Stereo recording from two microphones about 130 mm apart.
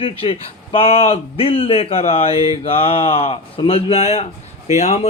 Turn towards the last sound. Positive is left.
turn(degrees=55)  # may be behind; listen again after turning